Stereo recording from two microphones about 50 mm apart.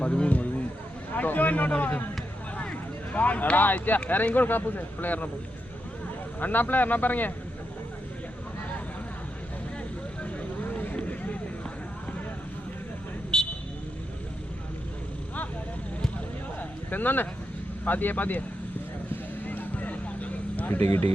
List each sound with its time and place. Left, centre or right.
0.0 s speech: left
6.4 s speech: left
10.6 s vehicle: left
13.3 s vehicle: centre
16.6 s a sound: left
17.8 s speech: left
19.5 s vehicle: left